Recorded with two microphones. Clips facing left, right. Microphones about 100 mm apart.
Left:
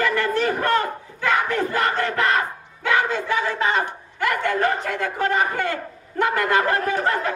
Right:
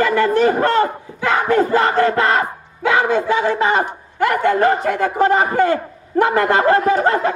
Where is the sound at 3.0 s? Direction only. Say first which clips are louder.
Right 6 dB; 55° right (ahead or behind).